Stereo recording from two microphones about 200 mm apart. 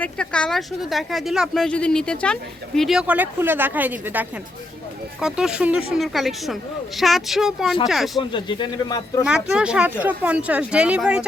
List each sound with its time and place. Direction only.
0.0 s speech: 5° left (ahead or behind)
8.3 s speech: 25° left (ahead or behind)
9.2 s speech: 5° right (ahead or behind)